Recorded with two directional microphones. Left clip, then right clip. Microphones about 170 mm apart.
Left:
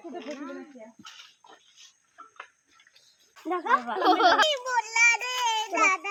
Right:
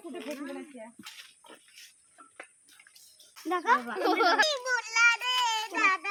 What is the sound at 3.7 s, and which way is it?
Speech, 20° right (ahead or behind).